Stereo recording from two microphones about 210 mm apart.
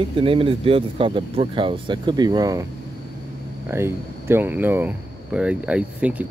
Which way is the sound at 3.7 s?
10° right (ahead or behind).